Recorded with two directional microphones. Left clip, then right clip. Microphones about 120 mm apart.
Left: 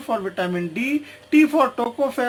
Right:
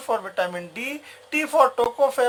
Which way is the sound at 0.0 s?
50° right (ahead or behind).